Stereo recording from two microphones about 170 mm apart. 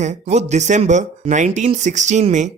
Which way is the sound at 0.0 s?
40° right (ahead or behind).